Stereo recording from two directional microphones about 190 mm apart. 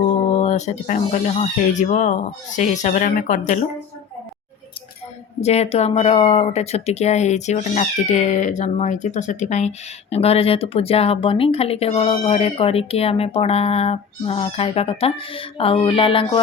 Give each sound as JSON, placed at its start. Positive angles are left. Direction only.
{"t": 0.3, "sound": "speech", "side_deg": 35}
{"t": 5.4, "sound": "speech", "side_deg": 35}